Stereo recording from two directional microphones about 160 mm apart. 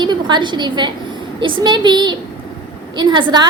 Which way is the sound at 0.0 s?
30° right (ahead or behind).